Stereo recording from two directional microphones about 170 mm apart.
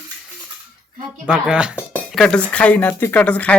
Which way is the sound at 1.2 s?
5° right (ahead or behind).